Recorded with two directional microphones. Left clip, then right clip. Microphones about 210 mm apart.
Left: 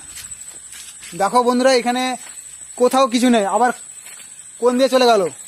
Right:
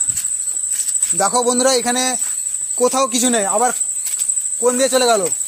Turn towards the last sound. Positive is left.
turn(degrees=30)  # may be behind; listen again after turning